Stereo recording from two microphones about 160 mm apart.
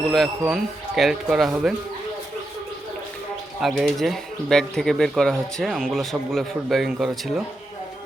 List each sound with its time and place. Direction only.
0.1 s speech: centre (ahead or behind)
3.6 s speech: centre (ahead or behind)